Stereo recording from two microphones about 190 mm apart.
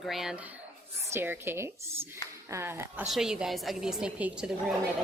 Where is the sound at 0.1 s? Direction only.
Centre (ahead or behind).